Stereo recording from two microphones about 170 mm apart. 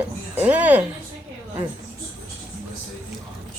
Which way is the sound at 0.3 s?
10° right (ahead or behind).